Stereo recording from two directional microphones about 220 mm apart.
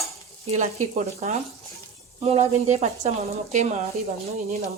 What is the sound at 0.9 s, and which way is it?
A woman's voice, 30° right (ahead or behind).